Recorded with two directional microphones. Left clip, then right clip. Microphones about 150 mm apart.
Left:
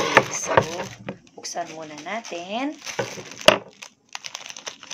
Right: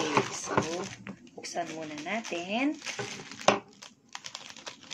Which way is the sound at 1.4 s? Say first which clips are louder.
Left 4 dB; 10° right (ahead or behind).